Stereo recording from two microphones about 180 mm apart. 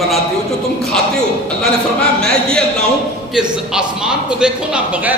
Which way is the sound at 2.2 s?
5° left (ahead or behind).